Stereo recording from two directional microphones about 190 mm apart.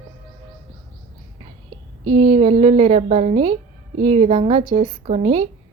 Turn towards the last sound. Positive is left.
turn(degrees=-35)  # may be behind; listen again after turning